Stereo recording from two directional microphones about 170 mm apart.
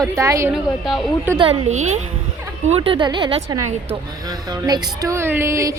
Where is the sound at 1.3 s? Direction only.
35° right (ahead or behind); by 5.8 s 20° right (ahead or behind).